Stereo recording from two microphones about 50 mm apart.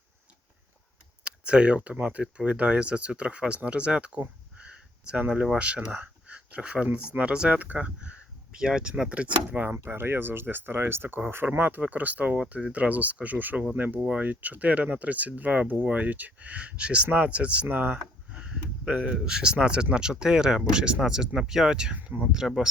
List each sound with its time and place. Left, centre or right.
1.2 s speech: right
4.5 s a sound: right
5.5 s speech: right
6.0 s a sound: right
6.9 s speech: right
9.0 s speech: right
9.7 s speech: right
17.7 s speech: right
18.3 s a sound: right
19.0 s speech: centre
21.9 s speech: right
22.3 s speech: centre